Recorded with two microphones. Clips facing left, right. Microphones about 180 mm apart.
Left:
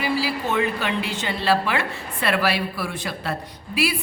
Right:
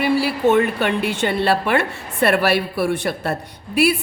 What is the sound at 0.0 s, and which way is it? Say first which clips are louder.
A woman's voice: right 7 dB; 60° right (ahead or behind).